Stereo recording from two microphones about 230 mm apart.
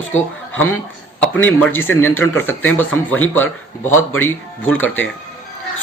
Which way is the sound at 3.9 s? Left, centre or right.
Left.